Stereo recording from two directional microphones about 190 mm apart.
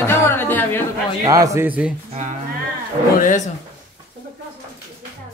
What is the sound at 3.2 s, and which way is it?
Speech, 40° left (ahead or behind).